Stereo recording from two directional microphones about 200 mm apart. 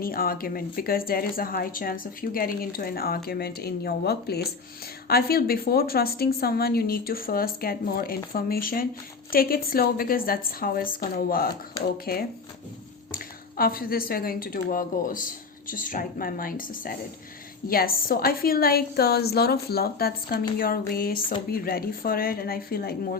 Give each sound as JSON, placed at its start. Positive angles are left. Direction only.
{"t": 0.0, "sound": "a woman's voice", "side_deg": 45}
{"t": 13.6, "sound": "a woman's voice", "side_deg": 45}